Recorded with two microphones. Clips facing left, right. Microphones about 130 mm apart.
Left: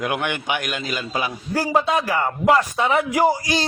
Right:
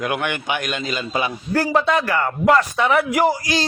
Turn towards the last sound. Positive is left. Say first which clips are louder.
# even
turn(degrees=15)  # may be behind; listen again after turning